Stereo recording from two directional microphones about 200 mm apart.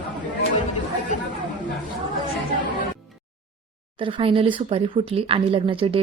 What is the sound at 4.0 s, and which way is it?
Speech, 25° right (ahead or behind).